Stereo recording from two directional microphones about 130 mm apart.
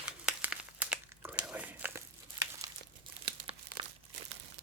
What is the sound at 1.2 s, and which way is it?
Crumpling, 10° right (ahead or behind).